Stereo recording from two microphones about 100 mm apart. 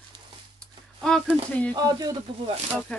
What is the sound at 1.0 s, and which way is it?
Speech, 10° left (ahead or behind).